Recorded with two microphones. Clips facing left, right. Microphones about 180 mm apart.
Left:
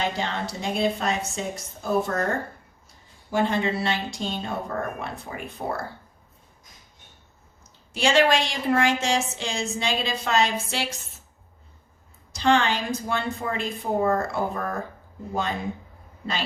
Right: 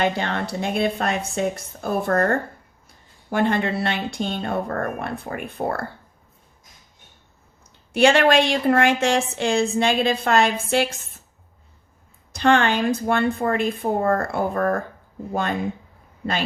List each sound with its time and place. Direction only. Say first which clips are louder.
0.0 s a woman's voice: right 5 dB; 60° right (ahead or behind)
7.9 s a woman's voice: right 5 dB; 60° right (ahead or behind)
12.3 s a woman's voice: right 3 dB; 55° right (ahead or behind)